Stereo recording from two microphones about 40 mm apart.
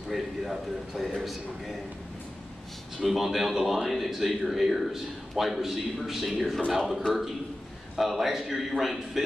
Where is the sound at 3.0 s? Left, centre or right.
Centre.